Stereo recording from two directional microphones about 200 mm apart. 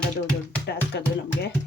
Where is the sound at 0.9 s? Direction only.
55° left (ahead or behind).